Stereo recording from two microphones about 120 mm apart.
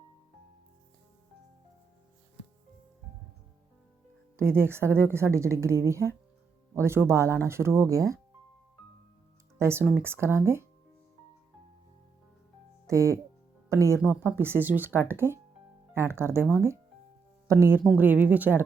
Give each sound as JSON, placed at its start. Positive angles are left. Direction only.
{"t": 4.4, "sound": "a woman's voice", "side_deg": -20}
{"t": 9.6, "sound": "a woman's voice", "side_deg": -20}
{"t": 12.9, "sound": "a woman's voice", "side_deg": -25}